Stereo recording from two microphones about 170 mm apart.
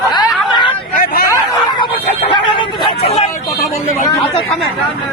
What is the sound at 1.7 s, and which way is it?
Speech, 30° left (ahead or behind).